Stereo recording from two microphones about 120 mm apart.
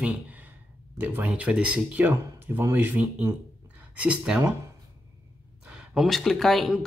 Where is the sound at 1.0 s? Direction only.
15° right (ahead or behind).